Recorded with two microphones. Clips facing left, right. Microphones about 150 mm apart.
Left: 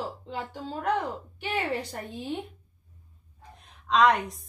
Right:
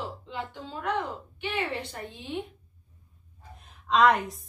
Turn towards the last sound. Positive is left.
turn(degrees=0)  # may be behind; listen again after turning